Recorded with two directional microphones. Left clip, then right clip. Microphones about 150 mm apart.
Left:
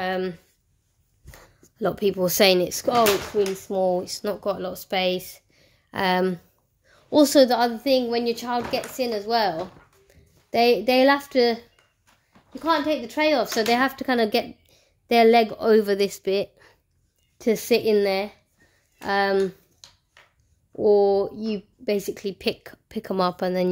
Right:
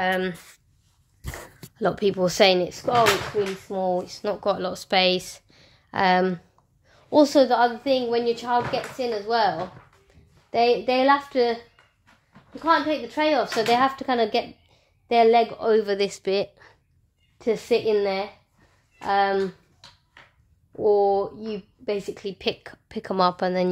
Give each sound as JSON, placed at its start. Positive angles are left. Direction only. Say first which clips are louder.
{"t": 0.0, "sound": "a sound", "louder": "right 2 dB", "side_deg": 40}
{"t": 1.8, "sound": "speech", "louder": "right 1 dB", "side_deg": 25}
{"t": 2.6, "sound": "speech", "louder": "even", "side_deg": 70}
{"t": 4.4, "sound": "a woman's voice", "louder": "right 2 dB", "side_deg": 15}
{"t": 5.9, "sound": "speech", "louder": "right 2 dB", "side_deg": 30}
{"t": 6.9, "sound": "a woman's voice", "louder": "even", "side_deg": 55}
{"t": 16.0, "sound": "speech", "louder": "left 1 dB", "side_deg": 30}
{"t": 17.4, "sound": "speech", "louder": "left 1 dB", "side_deg": 70}
{"t": 20.8, "sound": "a woman's voice", "louder": "left 1 dB", "side_deg": 65}